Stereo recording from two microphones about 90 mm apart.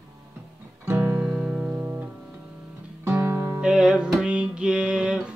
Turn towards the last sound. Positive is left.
turn(degrees=-10)  # may be behind; listen again after turning